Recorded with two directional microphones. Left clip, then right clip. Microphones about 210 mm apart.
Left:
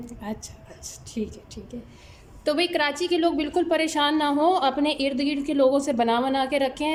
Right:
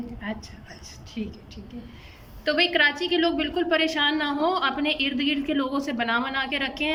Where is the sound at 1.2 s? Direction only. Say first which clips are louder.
Left 4 dB; 20° left (ahead or behind).